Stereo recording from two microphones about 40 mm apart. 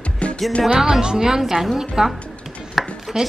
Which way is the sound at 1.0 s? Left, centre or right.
Centre.